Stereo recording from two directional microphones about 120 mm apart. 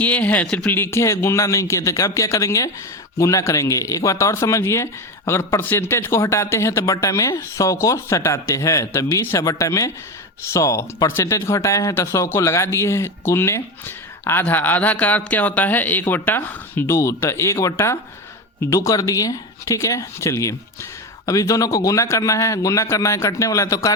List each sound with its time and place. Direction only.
0.0 s speech: 15° left (ahead or behind)